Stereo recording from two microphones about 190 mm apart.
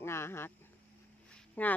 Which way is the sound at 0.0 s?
15° left (ahead or behind).